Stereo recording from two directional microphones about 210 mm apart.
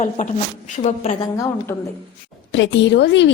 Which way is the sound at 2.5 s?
60° left (ahead or behind).